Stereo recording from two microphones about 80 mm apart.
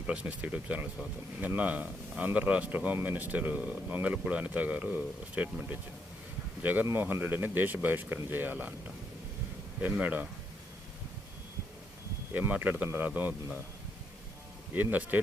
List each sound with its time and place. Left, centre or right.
0.1 s speech: centre
9.8 s speech: right
12.3 s speech: right
14.8 s speech: right